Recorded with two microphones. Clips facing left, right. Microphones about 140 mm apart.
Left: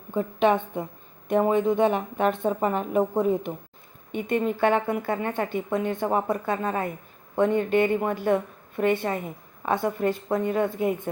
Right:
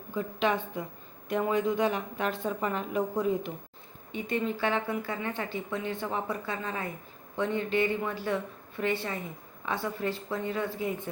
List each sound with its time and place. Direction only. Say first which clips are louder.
0.1 s a woman's voice: left 7 dB; 50° left (ahead or behind)